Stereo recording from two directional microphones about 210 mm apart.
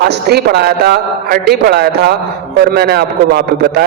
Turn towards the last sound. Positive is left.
turn(degrees=-50)  # may be behind; listen again after turning